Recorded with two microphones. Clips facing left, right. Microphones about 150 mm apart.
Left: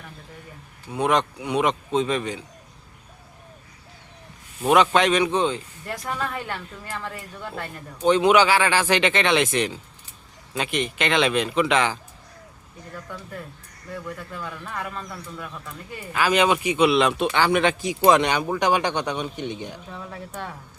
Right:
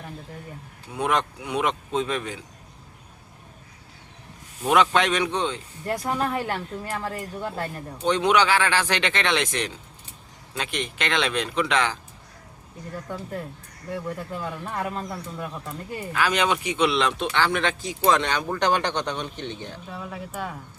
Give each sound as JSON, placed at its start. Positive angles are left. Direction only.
{"t": 0.9, "sound": "speech", "side_deg": 0}
{"t": 4.6, "sound": "speech", "side_deg": 0}
{"t": 6.1, "sound": "speech", "side_deg": -35}
{"t": 8.0, "sound": "speech", "side_deg": 5}
{"t": 13.1, "sound": "speech", "side_deg": -30}
{"t": 16.1, "sound": "speech", "side_deg": 5}
{"t": 19.9, "sound": "speech", "side_deg": -5}